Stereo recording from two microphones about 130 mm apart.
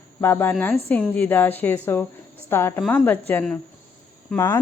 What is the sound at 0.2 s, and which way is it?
Speech, 15° left (ahead or behind).